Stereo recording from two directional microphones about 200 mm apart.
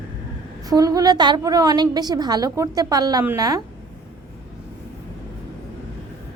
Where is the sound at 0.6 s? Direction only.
20° right (ahead or behind).